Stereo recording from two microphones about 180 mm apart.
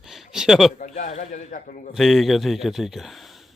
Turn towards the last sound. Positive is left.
turn(degrees=0)  # may be behind; listen again after turning